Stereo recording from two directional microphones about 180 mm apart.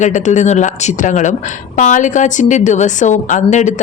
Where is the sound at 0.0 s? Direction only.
40° left (ahead or behind).